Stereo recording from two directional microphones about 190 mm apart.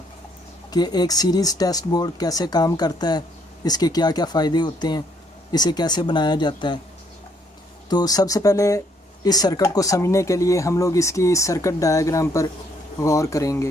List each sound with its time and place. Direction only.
0.7 s speech: 20° left (ahead or behind)
7.9 s speech: 20° left (ahead or behind)